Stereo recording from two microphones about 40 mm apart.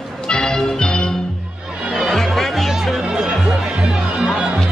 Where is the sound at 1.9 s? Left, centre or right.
Centre.